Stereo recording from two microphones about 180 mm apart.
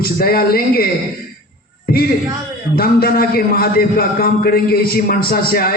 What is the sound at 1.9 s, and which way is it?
A man's voice, 60° left (ahead or behind).